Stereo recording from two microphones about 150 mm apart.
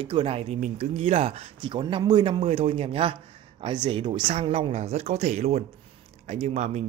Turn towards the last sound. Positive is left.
turn(degrees=-45)  # may be behind; listen again after turning